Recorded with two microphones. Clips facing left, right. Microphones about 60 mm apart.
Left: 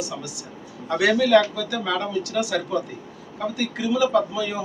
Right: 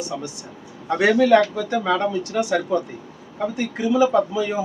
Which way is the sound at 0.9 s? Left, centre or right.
Right.